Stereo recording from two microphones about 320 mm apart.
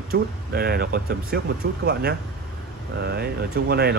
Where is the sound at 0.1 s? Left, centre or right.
Right.